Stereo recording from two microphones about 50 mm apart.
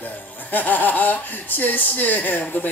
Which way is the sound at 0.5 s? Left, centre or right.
Left.